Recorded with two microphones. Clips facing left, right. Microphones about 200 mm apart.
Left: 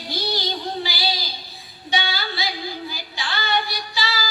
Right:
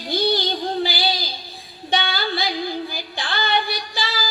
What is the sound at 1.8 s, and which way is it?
Female singing, 55° right (ahead or behind).